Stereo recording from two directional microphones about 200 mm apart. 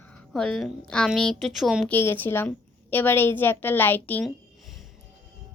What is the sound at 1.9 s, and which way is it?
A woman's voice, 10° left (ahead or behind).